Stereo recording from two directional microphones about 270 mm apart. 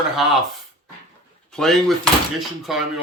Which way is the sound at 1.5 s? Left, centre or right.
Centre.